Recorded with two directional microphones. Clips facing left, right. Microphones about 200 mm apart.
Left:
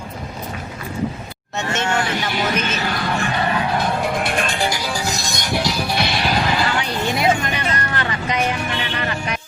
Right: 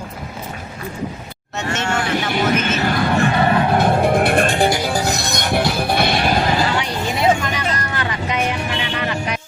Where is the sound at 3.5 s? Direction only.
55° right (ahead or behind).